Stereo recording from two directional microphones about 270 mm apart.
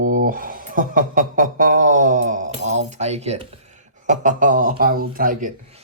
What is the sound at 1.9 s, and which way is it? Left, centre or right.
Keys jangling, right.